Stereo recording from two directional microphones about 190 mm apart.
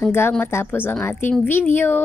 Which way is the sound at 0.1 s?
10° left (ahead or behind).